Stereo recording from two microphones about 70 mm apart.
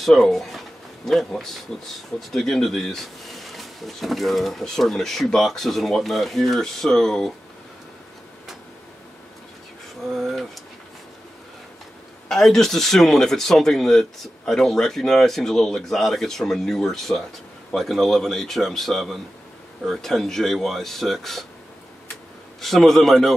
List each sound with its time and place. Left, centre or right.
0.0 s speech: centre
10.1 s speech: centre
12.3 s speech: centre
22.6 s speech: centre